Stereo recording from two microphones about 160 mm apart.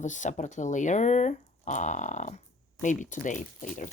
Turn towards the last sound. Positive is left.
turn(degrees=50)  # may be behind; listen again after turning